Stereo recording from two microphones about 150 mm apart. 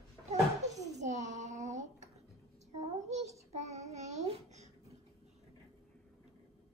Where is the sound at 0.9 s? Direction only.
50° right (ahead or behind).